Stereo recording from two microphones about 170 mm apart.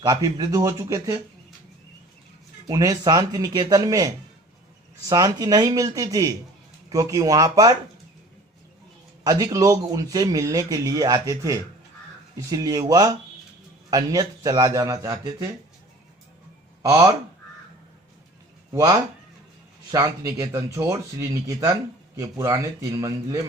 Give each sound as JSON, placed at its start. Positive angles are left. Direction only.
{"t": 0.0, "sound": "speech", "side_deg": -20}
{"t": 2.6, "sound": "speech", "side_deg": -20}
{"t": 9.2, "sound": "speech", "side_deg": -20}
{"t": 16.8, "sound": "speech", "side_deg": -20}
{"t": 18.7, "sound": "speech", "side_deg": -20}